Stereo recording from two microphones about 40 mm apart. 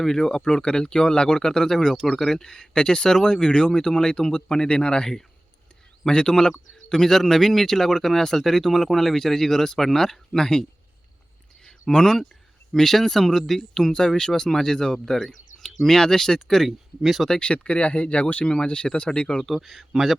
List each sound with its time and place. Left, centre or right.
0.0 s speech: centre
11.6 s a sound: centre
12.7 s speech: centre
16.6 s speech: centre
17.4 s speech: left
19.9 s speech: centre